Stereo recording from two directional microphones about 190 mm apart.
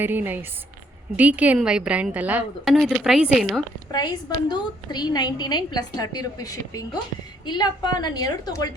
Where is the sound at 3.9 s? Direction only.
20° left (ahead or behind).